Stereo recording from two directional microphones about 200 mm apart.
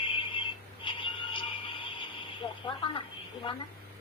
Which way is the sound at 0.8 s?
25° left (ahead or behind).